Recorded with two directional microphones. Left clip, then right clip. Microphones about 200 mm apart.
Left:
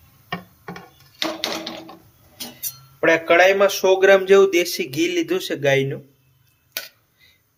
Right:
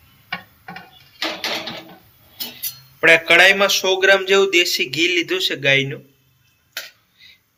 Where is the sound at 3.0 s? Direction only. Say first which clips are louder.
Right 3 dB; 30° left (ahead or behind).